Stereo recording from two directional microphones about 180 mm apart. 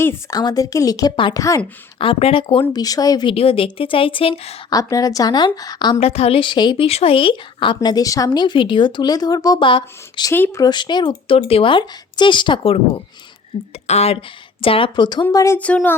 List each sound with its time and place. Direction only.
0.0 s a woman's voice: 15° left (ahead or behind)
2.0 s a woman's voice: 30° left (ahead or behind)
4.7 s a woman's voice: 20° left (ahead or behind)
6.0 s a woman's voice: 35° left (ahead or behind)
10.3 s a woman's voice: 15° left (ahead or behind)